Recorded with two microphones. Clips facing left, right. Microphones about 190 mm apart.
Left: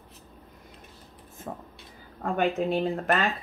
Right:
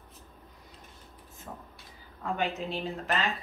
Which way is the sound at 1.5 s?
50° left (ahead or behind).